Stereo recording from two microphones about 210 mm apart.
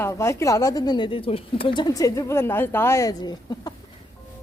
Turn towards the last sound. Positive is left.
turn(degrees=20)  # may be behind; listen again after turning